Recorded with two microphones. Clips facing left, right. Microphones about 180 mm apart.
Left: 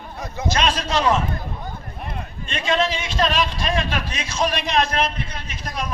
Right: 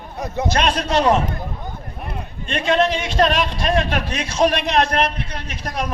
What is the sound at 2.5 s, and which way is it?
Speech, 60° right (ahead or behind).